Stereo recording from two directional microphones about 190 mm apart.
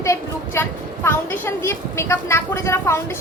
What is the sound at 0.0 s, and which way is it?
A woman's voice, 15° left (ahead or behind).